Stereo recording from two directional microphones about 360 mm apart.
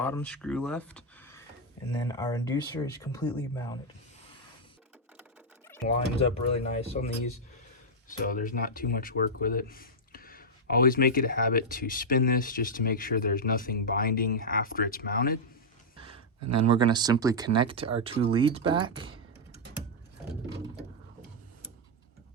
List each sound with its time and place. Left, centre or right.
0.0 s speech: centre
5.6 s speech: centre
8.2 s speech: left
16.0 s a sound: centre
16.6 s speech: centre